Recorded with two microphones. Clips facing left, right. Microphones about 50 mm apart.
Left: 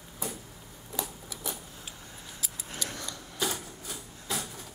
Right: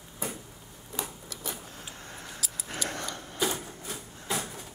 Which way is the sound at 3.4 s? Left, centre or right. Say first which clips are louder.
Right 2 dB; centre.